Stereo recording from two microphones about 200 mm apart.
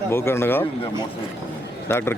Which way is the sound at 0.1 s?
10° left (ahead or behind).